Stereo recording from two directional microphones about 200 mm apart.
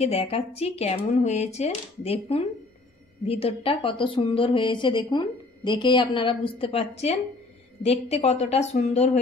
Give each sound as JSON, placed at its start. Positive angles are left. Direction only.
{"t": 0.0, "sound": "a woman's voice", "side_deg": 30}